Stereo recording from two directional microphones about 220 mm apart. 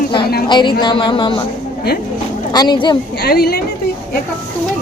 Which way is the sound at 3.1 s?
45° left (ahead or behind).